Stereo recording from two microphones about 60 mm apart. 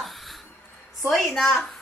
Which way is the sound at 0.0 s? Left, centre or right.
Centre.